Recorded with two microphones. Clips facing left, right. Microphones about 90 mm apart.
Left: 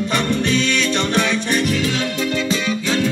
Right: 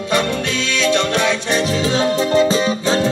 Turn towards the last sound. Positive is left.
turn(degrees=-35)  # may be behind; listen again after turning